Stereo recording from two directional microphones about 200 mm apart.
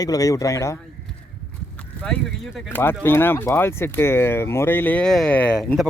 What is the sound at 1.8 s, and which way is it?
Speech, 5° left (ahead or behind).